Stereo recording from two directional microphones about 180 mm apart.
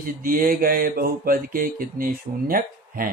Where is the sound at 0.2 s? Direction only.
50° right (ahead or behind).